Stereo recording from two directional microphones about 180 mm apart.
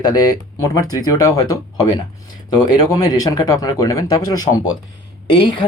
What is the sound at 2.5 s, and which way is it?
Speech, 20° left (ahead or behind).